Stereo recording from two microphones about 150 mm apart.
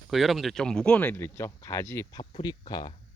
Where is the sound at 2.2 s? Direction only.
35° left (ahead or behind).